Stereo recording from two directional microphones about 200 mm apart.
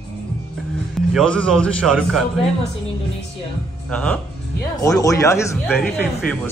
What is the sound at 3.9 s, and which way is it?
Speech, 5° left (ahead or behind).